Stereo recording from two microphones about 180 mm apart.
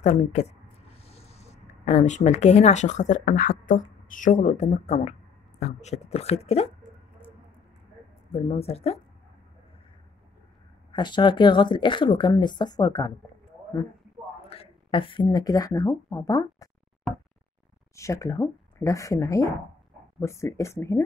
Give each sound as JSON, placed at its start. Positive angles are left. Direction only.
{"t": 0.0, "sound": "speech", "side_deg": 40}
{"t": 8.3, "sound": "speech", "side_deg": 35}
{"t": 10.9, "sound": "speech", "side_deg": 25}
{"t": 14.5, "sound": "speech", "side_deg": 30}
{"t": 17.9, "sound": "speech", "side_deg": 15}